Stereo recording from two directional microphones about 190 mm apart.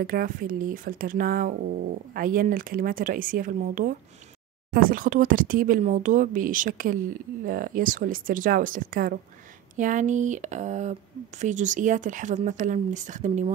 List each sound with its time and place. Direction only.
0.0 s speech: 45° right (ahead or behind)